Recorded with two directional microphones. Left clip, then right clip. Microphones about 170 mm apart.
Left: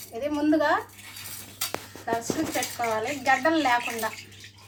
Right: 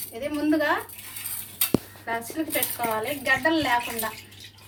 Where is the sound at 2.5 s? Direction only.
15° right (ahead or behind).